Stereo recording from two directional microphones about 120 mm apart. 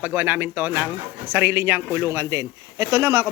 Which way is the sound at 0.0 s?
15° right (ahead or behind).